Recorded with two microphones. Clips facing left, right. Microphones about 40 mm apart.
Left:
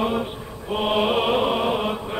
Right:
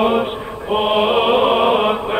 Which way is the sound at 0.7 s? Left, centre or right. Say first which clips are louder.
Right 6 dB; right.